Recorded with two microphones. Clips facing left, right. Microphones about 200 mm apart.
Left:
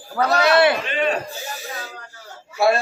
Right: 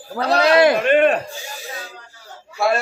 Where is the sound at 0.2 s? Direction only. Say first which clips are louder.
Right 2 dB; 30° right (ahead or behind).